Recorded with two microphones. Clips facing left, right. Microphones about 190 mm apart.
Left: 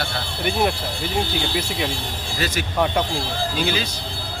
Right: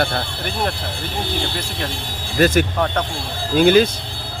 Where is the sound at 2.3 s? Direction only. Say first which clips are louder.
Right 8 dB; 50° right (ahead or behind).